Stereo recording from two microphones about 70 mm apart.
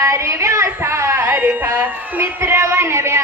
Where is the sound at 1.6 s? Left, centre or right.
Right.